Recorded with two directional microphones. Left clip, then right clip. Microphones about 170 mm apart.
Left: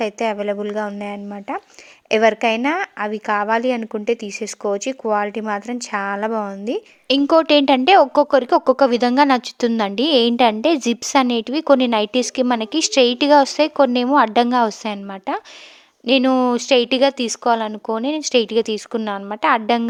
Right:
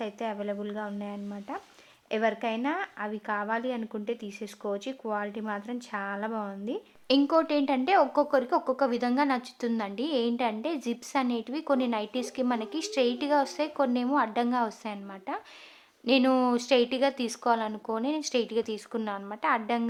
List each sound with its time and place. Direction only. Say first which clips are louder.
0.0 s a woman's voice: left 13 dB; 35° left (ahead or behind)
7.3 s speech: left 12 dB; 45° left (ahead or behind)